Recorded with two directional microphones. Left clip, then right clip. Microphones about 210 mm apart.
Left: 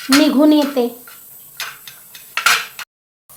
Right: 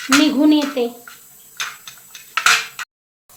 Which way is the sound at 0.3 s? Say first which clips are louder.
Left 3 dB; 25° left (ahead or behind).